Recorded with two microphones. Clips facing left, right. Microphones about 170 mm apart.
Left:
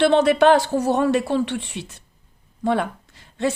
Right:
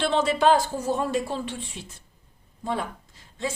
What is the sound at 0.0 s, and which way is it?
Speech, 65° left (ahead or behind).